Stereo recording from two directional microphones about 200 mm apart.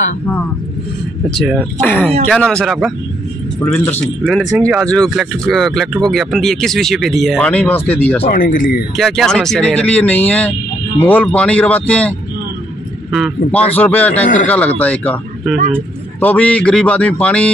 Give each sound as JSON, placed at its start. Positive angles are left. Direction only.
{"t": 1.3, "sound": "speech", "side_deg": 0}
{"t": 8.3, "sound": "speech", "side_deg": 40}
{"t": 8.9, "sound": "speech", "side_deg": 0}